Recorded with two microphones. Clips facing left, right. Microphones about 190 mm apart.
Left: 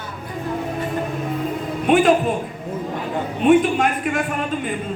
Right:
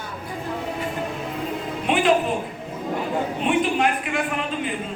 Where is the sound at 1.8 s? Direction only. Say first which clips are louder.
Left 6 dB; 45° left (ahead or behind).